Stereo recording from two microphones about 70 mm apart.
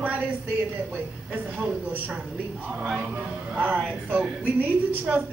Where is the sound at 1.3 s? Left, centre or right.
Right.